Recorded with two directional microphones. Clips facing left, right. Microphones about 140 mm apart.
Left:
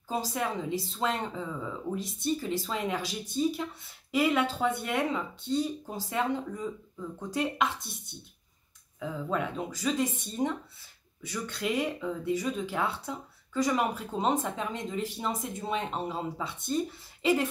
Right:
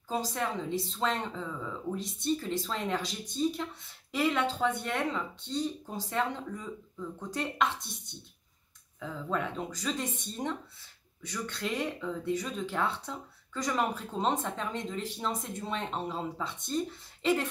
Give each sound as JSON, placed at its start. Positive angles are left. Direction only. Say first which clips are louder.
{"t": 0.1, "sound": "speech", "louder": "left 1 dB", "side_deg": 10}
{"t": 9.0, "sound": "speech", "louder": "left 2 dB", "side_deg": 5}